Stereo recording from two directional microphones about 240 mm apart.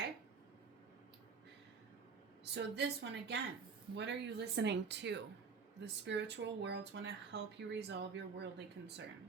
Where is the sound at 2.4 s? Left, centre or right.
Right.